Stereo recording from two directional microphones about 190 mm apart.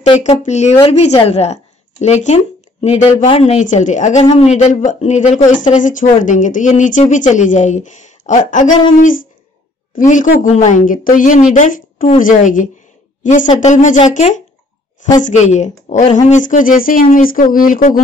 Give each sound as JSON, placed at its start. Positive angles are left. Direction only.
{"t": 0.0, "sound": "speech", "side_deg": 30}
{"t": 9.9, "sound": "a woman's voice", "side_deg": 40}